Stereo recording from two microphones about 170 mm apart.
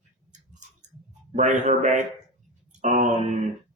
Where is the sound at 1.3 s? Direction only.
45° right (ahead or behind).